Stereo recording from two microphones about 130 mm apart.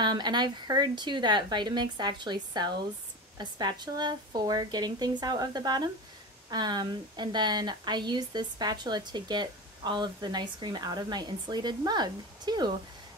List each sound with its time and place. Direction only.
0.0 s speech: 35° right (ahead or behind)